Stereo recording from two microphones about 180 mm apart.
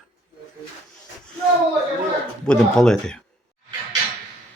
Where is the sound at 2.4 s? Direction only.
5° left (ahead or behind).